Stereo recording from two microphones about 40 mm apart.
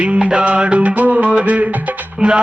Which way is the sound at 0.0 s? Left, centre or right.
Right.